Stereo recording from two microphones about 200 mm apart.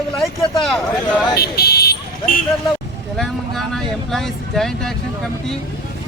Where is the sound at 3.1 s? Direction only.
Centre (ahead or behind).